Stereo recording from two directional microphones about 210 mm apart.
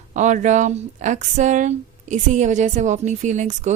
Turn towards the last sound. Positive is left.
turn(degrees=-35)  # may be behind; listen again after turning